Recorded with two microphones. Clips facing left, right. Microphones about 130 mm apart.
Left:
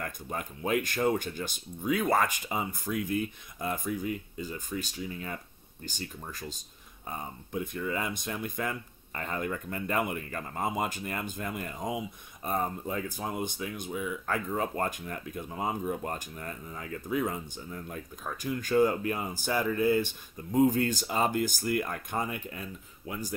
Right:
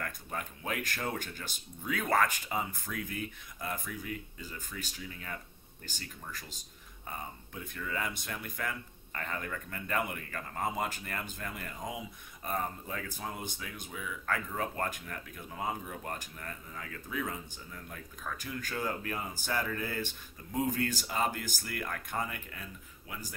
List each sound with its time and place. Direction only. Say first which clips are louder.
0.0 s speech: left 3 dB; 25° left (ahead or behind)
7.1 s speech: left 4 dB; 20° left (ahead or behind)
20.5 s speech: left 8 dB; 25° left (ahead or behind)